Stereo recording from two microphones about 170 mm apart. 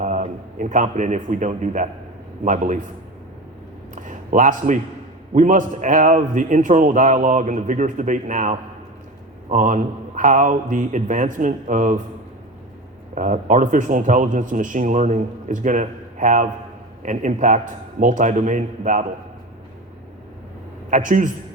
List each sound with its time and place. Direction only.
0.0 s a man's voice: 45° right (ahead or behind)
3.9 s a sound: 50° right (ahead or behind)
5.3 s speech: 50° right (ahead or behind)
13.1 s speech: 45° right (ahead or behind)
20.9 s speech: 50° right (ahead or behind)